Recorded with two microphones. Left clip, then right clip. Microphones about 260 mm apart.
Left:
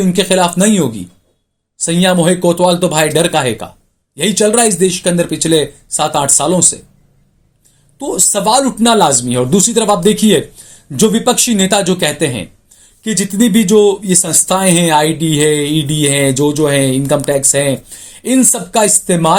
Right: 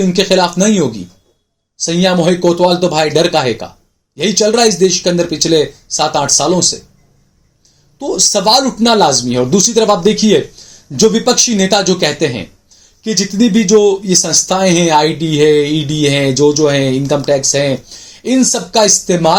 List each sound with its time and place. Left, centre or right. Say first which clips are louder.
0.0 s speech: right 1 dB; left
7.9 s speech: right 3 dB; left